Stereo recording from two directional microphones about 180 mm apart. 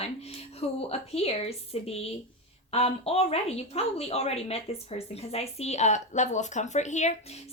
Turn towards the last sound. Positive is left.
turn(degrees=40)  # may be behind; listen again after turning